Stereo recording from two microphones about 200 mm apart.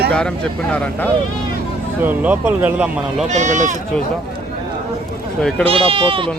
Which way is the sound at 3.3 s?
35° right (ahead or behind).